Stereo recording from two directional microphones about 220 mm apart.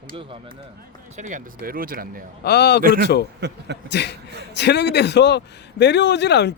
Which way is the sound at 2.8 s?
40° right (ahead or behind).